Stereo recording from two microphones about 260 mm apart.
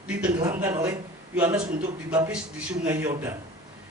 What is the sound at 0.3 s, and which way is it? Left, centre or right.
A man's voice, centre.